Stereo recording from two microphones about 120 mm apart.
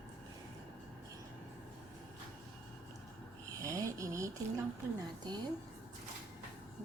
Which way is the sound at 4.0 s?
25° right (ahead or behind).